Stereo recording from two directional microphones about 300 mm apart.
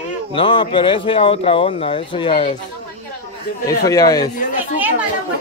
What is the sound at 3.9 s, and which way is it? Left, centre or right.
Speech, centre.